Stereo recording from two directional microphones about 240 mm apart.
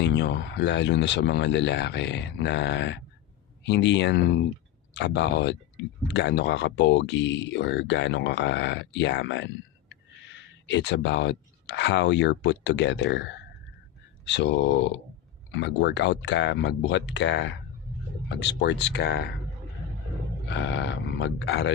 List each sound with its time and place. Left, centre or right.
0.0 s speech: left
10.7 s speech: left
14.3 s speech: left
18.6 s speech: left
20.5 s speech: left